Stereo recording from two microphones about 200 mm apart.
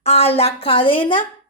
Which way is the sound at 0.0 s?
30° left (ahead or behind).